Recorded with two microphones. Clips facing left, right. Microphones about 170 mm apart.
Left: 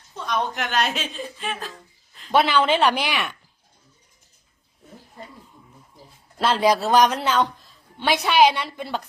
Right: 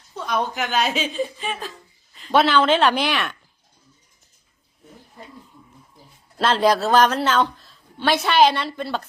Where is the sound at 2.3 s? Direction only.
10° left (ahead or behind).